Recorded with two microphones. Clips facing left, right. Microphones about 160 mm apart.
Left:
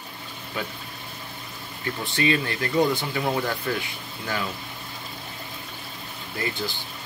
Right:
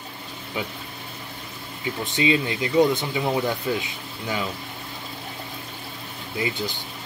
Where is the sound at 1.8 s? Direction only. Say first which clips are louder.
Right 2 dB; 15° right (ahead or behind).